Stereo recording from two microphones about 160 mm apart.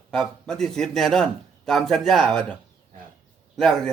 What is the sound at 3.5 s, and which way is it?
Speech, centre (ahead or behind).